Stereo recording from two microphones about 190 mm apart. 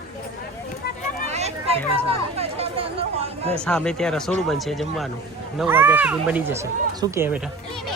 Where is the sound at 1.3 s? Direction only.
35° right (ahead or behind).